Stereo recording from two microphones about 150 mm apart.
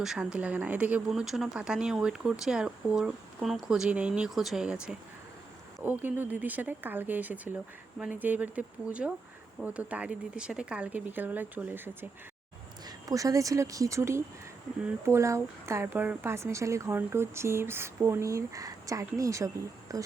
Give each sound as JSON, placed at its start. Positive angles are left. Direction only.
{"t": 0.0, "sound": "speech", "side_deg": -5}
{"t": 12.8, "sound": "speech", "side_deg": -25}